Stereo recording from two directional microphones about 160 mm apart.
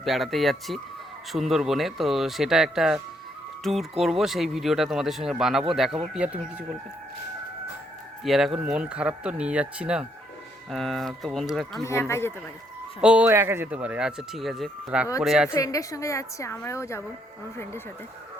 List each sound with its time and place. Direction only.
0.0 s speech: centre (ahead or behind)
8.2 s speech: centre (ahead or behind)
11.9 s speech: 15° left (ahead or behind)
13.0 s speech: 5° right (ahead or behind)
15.5 s a woman's voice: 20° left (ahead or behind)